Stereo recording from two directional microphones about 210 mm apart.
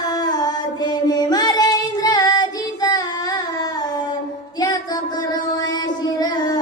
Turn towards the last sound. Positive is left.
turn(degrees=20)  # may be behind; listen again after turning